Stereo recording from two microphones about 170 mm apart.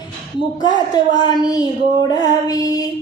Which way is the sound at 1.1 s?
25° left (ahead or behind).